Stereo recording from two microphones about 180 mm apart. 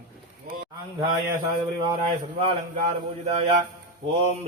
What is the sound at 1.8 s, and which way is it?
Speech, 30° right (ahead or behind).